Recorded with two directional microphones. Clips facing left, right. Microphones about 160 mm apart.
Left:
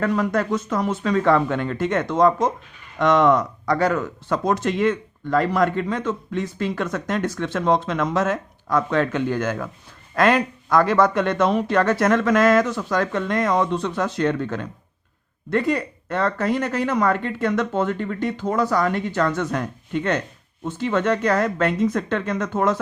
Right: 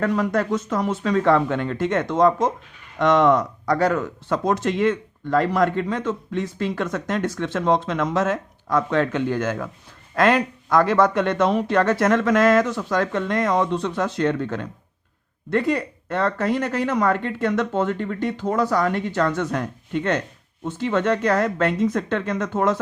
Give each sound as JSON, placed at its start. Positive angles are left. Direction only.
{"t": 0.2, "sound": "speech", "side_deg": -35}